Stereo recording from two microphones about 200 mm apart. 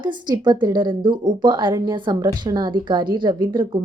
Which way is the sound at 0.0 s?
20° right (ahead or behind).